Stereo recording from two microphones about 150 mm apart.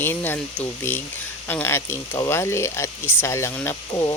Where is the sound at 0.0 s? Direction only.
15° left (ahead or behind).